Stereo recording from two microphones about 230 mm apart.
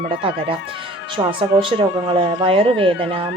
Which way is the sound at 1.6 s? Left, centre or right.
Right.